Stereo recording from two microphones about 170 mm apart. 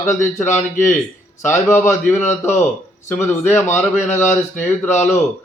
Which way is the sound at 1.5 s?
15° left (ahead or behind).